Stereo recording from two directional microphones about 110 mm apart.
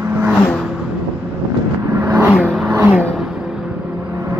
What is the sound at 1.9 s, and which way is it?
Vehicle, 20° right (ahead or behind).